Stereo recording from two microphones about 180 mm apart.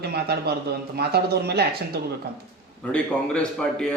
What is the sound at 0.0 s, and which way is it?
Speech, 60° right (ahead or behind).